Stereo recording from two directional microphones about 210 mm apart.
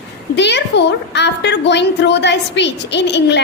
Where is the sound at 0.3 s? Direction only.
55° left (ahead or behind).